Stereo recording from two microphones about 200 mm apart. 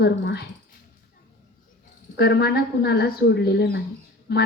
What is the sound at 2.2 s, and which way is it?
A woman's voice, 55° left (ahead or behind).